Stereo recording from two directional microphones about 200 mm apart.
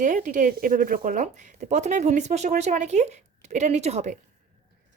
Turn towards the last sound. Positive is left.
turn(degrees=-35)  # may be behind; listen again after turning